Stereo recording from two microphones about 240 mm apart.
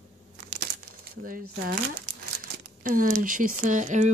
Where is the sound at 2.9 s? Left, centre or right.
Right.